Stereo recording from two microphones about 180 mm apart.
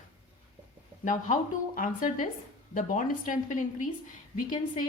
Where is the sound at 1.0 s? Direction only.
45° left (ahead or behind).